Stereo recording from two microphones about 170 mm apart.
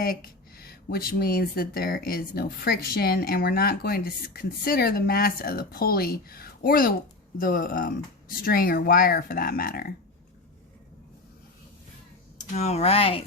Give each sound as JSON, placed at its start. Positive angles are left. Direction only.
{"t": 0.0, "sound": "speech", "side_deg": 60}
{"t": 12.4, "sound": "speech", "side_deg": 40}